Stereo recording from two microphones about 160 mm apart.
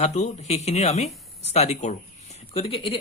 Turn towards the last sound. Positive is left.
turn(degrees=35)  # may be behind; listen again after turning